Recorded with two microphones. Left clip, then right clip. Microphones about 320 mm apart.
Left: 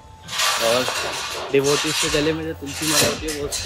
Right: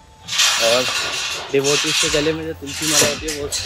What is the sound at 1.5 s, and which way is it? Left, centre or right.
Speech, centre.